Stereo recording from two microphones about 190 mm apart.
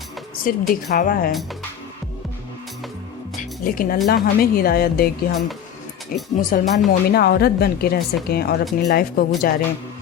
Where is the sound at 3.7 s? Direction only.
50° left (ahead or behind).